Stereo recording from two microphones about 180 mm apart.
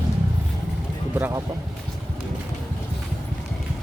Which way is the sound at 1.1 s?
10° right (ahead or behind).